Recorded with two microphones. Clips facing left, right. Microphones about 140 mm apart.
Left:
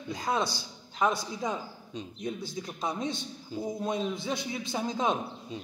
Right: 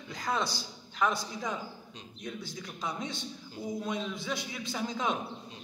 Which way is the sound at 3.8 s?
35° left (ahead or behind).